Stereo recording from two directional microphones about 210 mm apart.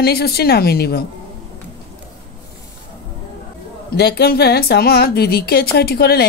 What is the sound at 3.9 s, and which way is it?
A woman's voice, 50° left (ahead or behind).